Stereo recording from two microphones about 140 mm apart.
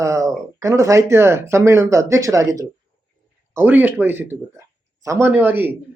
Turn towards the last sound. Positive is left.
turn(degrees=-15)  # may be behind; listen again after turning